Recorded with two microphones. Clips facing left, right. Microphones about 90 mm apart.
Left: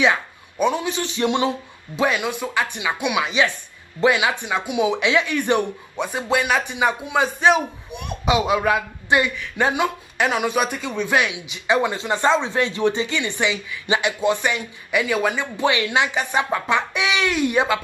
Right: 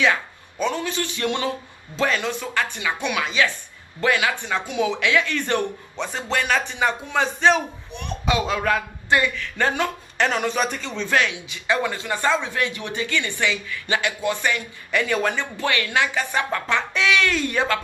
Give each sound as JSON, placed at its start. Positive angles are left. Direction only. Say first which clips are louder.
{"t": 0.0, "sound": "speech", "louder": "left 2 dB", "side_deg": 15}
{"t": 15.5, "sound": "speech", "louder": "left 3 dB", "side_deg": 20}